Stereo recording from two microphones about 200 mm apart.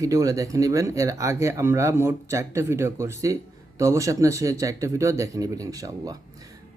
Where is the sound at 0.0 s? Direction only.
15° right (ahead or behind).